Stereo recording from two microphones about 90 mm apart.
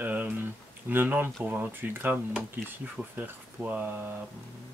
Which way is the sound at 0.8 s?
20° right (ahead or behind).